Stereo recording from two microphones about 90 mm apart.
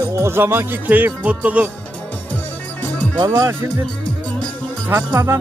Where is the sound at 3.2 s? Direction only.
40° right (ahead or behind).